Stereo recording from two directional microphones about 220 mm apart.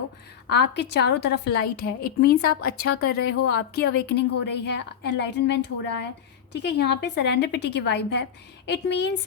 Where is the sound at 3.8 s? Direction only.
50° left (ahead or behind).